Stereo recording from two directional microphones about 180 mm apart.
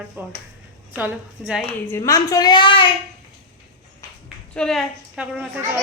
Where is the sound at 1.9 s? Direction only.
15° left (ahead or behind).